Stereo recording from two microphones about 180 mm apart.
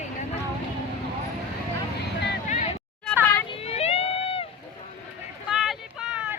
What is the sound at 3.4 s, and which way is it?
Vehicle, 30° left (ahead or behind).